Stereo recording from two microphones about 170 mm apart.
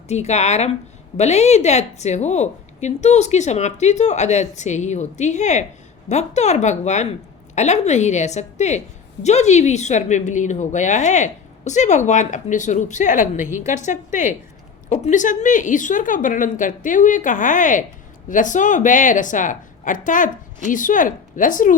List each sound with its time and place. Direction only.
0.1 s a woman's voice: 40° left (ahead or behind)